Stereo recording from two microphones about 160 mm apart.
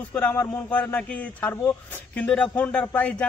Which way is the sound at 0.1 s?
10° left (ahead or behind).